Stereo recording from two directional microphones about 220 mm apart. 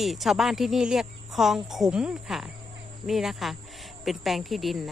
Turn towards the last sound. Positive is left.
turn(degrees=0)  # may be behind; listen again after turning